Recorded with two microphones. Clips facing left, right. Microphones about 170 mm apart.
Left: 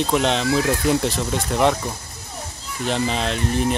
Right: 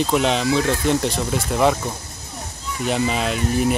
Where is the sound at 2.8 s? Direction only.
5° right (ahead or behind).